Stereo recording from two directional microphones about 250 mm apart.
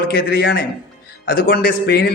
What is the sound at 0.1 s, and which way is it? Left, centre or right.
Speech, left.